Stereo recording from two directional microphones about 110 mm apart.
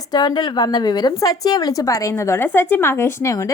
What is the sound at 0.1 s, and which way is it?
A woman's voice, 40° left (ahead or behind).